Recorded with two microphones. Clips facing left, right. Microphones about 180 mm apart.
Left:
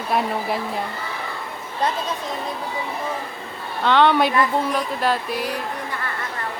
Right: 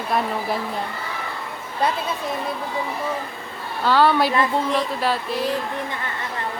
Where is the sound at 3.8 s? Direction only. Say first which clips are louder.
Left 1 dB; 5° right (ahead or behind).